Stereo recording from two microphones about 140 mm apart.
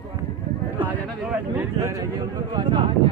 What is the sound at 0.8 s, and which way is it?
Speech, 10° right (ahead or behind).